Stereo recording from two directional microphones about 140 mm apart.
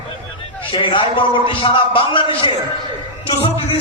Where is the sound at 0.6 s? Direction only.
40° left (ahead or behind).